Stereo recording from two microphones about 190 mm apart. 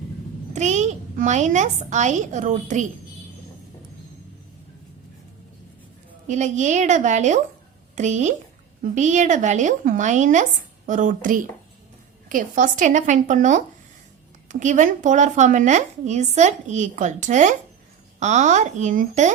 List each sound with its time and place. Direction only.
0.5 s a child's voice: 40° right (ahead or behind)
6.2 s a woman's voice: 40° right (ahead or behind)